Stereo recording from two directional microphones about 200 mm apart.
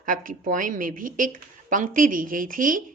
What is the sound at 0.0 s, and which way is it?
Speech, 40° right (ahead or behind).